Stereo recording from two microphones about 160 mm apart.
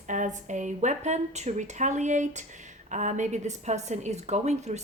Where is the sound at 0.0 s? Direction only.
50° right (ahead or behind).